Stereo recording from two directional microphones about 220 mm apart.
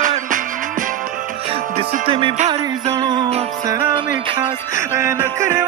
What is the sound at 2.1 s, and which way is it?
Music, 25° right (ahead or behind).